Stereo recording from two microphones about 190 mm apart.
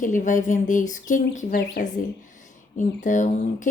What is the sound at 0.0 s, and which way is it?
Speech, 45° left (ahead or behind).